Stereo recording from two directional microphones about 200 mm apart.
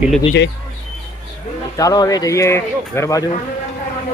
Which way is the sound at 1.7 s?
15° left (ahead or behind).